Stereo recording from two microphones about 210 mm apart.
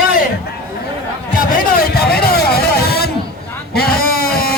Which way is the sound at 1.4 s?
45° left (ahead or behind).